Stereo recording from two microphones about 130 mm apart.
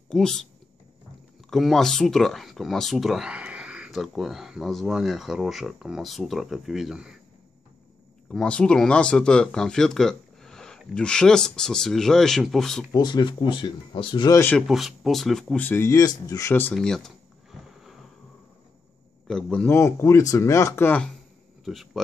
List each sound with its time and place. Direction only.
0.1 s speech: 5° left (ahead or behind)
1.5 s speech: centre (ahead or behind)
8.3 s speech: 5° left (ahead or behind)
12.9 s speech: 35° left (ahead or behind)
14.3 s speech: 15° left (ahead or behind)
14.7 s speech: centre (ahead or behind)
15.6 s speech: 20° left (ahead or behind)
16.7 s a sound: 5° left (ahead or behind)
19.2 s speech: 5° left (ahead or behind)
21.6 s speech: centre (ahead or behind)